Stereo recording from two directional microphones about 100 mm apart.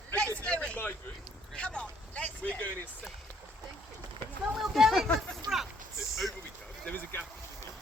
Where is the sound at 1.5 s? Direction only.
10° left (ahead or behind).